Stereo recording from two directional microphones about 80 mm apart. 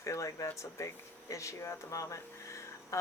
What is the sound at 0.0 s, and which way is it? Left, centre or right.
Speech, left.